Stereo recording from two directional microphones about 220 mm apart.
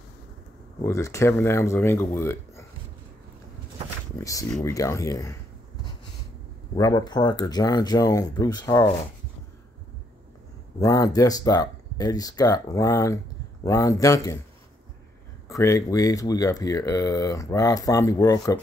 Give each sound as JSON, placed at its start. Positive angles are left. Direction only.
{"t": 0.8, "sound": "speech", "side_deg": 15}
{"t": 4.2, "sound": "speech", "side_deg": 15}
{"t": 6.7, "sound": "speech", "side_deg": 15}
{"t": 10.8, "sound": "speech", "side_deg": 15}
{"t": 15.4, "sound": "speech", "side_deg": 15}